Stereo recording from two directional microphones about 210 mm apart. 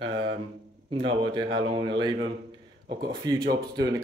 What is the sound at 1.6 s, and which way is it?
Speech, 25° right (ahead or behind).